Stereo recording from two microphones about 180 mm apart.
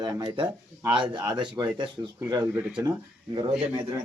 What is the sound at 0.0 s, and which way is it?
Speech, 25° right (ahead or behind).